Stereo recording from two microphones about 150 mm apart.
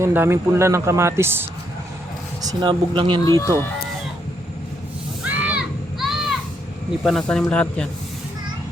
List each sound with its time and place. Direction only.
0.0 s speech: 15° right (ahead or behind); by 3.2 s 30° right (ahead or behind)
3.2 s speech: 20° left (ahead or behind)
5.2 s a sound: 10° right (ahead or behind)
7.0 s speech: centre (ahead or behind)